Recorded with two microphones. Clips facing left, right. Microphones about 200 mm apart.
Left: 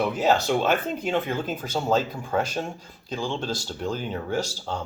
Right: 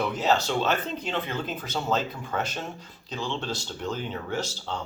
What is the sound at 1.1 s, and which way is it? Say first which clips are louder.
Speech: left 5 dB; 45° left (ahead or behind).